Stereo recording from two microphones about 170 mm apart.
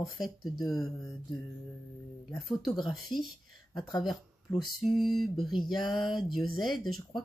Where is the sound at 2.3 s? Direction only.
Centre (ahead or behind).